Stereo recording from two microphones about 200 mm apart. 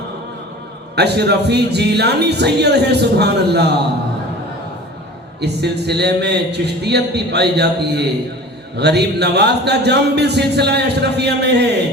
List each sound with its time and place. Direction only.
0.9 s speech: 55° right (ahead or behind)
5.4 s speech: 55° right (ahead or behind)